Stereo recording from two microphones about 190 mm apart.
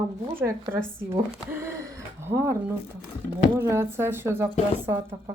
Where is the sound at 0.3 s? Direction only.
15° right (ahead or behind).